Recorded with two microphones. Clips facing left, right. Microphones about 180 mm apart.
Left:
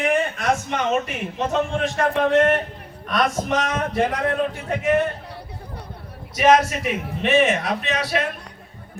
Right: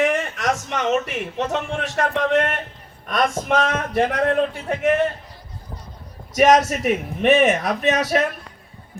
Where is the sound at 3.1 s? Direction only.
55° right (ahead or behind).